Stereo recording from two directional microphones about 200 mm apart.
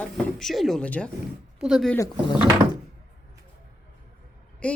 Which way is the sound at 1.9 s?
20° left (ahead or behind).